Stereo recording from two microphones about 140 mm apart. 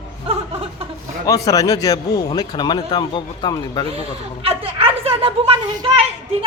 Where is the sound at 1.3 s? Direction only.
25° left (ahead or behind).